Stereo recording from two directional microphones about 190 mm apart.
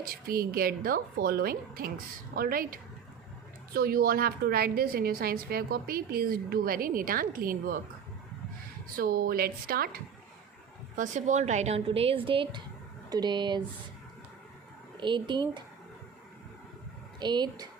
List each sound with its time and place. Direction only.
0.0 s a woman's voice: 50° right (ahead or behind)
9.0 s a woman's voice: 50° right (ahead or behind)
10.9 s speech: 40° right (ahead or behind); by 13.6 s 25° right (ahead or behind)
14.9 s speech: 25° right (ahead or behind)
17.2 s speech: 25° right (ahead or behind)